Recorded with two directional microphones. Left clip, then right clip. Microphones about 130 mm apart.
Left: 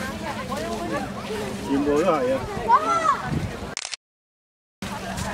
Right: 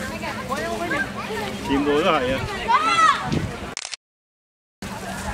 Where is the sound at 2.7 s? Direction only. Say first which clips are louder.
Right 2 dB; 30° right (ahead or behind).